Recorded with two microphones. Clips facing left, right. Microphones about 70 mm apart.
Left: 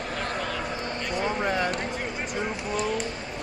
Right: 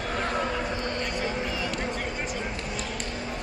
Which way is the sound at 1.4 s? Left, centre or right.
Left.